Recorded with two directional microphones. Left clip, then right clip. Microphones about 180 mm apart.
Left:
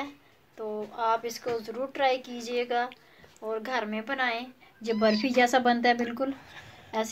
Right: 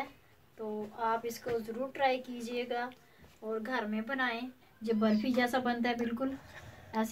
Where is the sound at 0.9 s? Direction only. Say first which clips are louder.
Left 6 dB; 30° left (ahead or behind).